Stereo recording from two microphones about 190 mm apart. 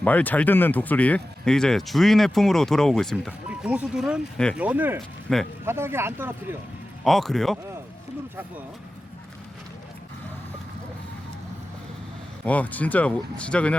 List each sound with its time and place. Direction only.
0.0 s speech: 10° left (ahead or behind); by 4.9 s 10° right (ahead or behind)
5.3 s speech: centre (ahead or behind)
5.6 s speech: 15° right (ahead or behind)
7.0 s speech: centre (ahead or behind)
12.5 s speech: 10° left (ahead or behind)